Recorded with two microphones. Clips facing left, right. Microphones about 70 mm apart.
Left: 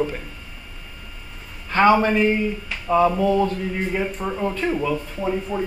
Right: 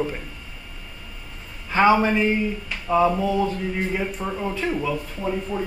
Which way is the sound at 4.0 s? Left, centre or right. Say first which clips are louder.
Left 2 dB; centre.